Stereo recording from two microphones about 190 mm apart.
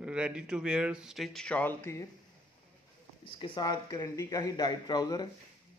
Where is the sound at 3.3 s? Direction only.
25° left (ahead or behind).